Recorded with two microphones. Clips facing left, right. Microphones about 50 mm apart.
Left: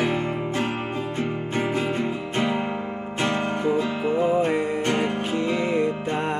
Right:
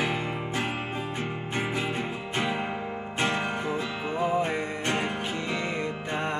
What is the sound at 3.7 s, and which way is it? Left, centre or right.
Music, centre.